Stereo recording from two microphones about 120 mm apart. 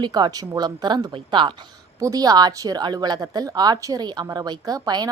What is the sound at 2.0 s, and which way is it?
A woman's voice, 30° right (ahead or behind).